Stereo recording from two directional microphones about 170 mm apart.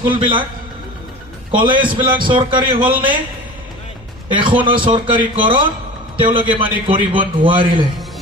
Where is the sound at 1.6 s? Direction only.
30° right (ahead or behind).